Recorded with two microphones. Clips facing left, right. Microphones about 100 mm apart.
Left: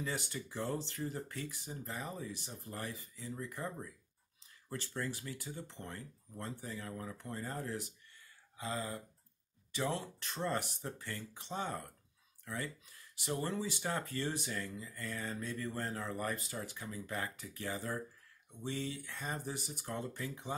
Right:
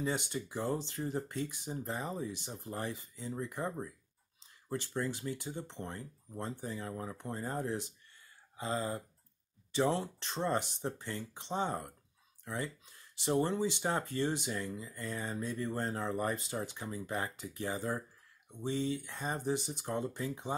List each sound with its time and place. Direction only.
0.0 s speech: 20° right (ahead or behind)